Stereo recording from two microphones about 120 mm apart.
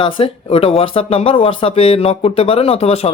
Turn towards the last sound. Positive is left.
turn(degrees=55)  # may be behind; listen again after turning